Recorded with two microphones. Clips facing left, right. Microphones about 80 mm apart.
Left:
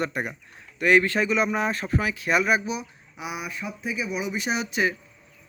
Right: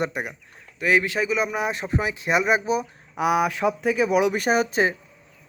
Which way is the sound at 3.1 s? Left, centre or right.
Right.